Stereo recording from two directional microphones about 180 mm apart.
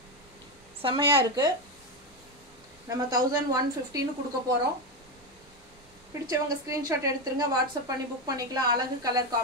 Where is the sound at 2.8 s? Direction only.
20° right (ahead or behind).